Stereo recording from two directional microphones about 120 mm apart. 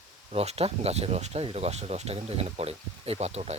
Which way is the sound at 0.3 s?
55° right (ahead or behind).